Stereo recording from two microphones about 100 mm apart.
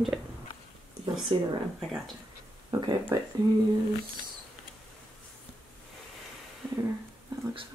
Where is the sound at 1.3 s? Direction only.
60° right (ahead or behind).